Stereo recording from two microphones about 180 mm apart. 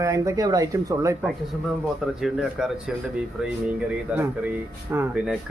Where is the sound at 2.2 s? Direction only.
Centre (ahead or behind).